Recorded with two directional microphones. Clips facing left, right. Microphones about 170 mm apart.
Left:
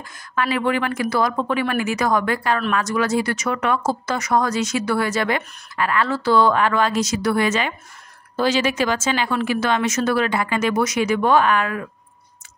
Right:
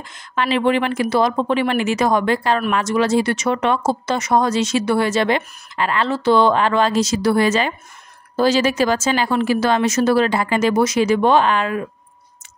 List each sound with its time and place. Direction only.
0.0 s a woman's voice: 25° right (ahead or behind)